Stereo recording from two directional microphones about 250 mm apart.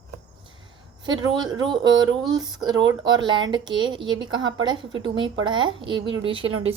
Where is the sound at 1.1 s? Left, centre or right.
Centre.